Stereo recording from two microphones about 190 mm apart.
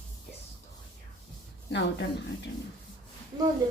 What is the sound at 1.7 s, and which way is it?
Speech, 65° left (ahead or behind).